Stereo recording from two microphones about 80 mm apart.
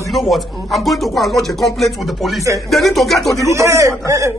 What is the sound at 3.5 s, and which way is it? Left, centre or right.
Speech, right.